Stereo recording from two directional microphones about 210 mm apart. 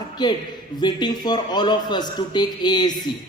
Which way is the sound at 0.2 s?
20° left (ahead or behind).